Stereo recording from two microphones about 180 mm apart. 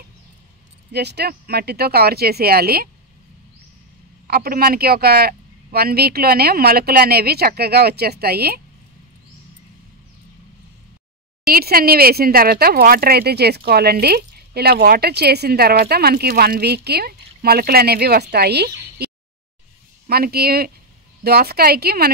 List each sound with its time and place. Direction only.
0.9 s speech: 65° right (ahead or behind)
4.3 s speech: 55° right (ahead or behind)
11.5 s speech: 55° right (ahead or behind)
20.1 s speech: 60° right (ahead or behind)